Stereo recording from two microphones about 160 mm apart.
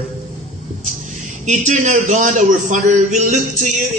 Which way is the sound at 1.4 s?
45° right (ahead or behind).